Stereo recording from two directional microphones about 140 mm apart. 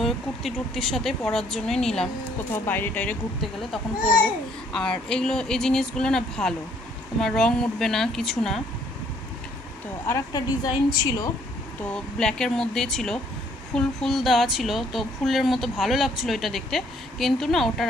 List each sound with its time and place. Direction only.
0.0 s speech: centre (ahead or behind)
2.5 s speech: 15° left (ahead or behind)
4.7 s speech: 5° left (ahead or behind)
10.0 s speech: 25° left (ahead or behind)
11.8 s speech: 5° left (ahead or behind)